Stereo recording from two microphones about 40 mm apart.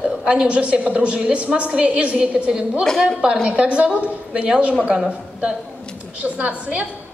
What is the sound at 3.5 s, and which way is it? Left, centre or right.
Speech, right.